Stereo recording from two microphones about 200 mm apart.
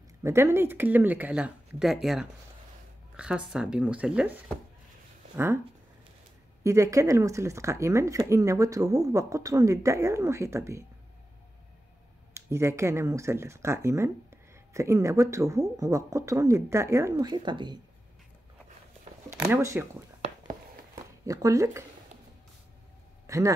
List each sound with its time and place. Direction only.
0.2 s speech: 15° right (ahead or behind)
6.6 s speech: 15° right (ahead or behind)
12.4 s speech: 15° right (ahead or behind)
19.5 s speech: 15° right (ahead or behind)
21.3 s speech: 15° right (ahead or behind)
23.2 s a sound: 15° right (ahead or behind)